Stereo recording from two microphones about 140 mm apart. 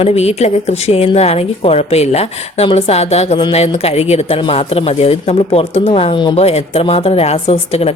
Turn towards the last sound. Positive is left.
turn(degrees=45)  # may be behind; listen again after turning